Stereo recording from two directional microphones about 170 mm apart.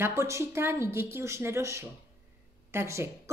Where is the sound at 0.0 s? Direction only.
15° right (ahead or behind).